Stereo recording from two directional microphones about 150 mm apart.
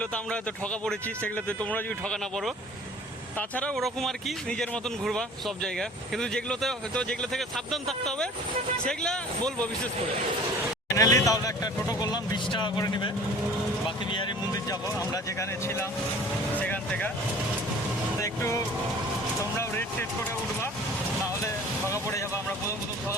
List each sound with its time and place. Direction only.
0.0 s a man's voice: 5° left (ahead or behind)
10.9 s speech: 25° left (ahead or behind)
15.1 s speech: 20° left (ahead or behind)
16.6 s vehicle: 10° left (ahead or behind)
18.2 s speech: 20° left (ahead or behind)
21.4 s vehicle: 20° left (ahead or behind)